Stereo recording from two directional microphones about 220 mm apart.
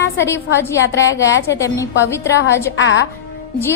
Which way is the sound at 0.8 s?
55° left (ahead or behind).